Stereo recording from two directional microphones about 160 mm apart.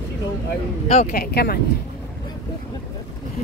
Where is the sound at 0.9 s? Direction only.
50° left (ahead or behind).